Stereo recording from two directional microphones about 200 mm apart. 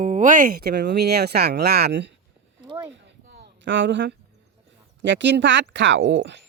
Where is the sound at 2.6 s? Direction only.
15° right (ahead or behind).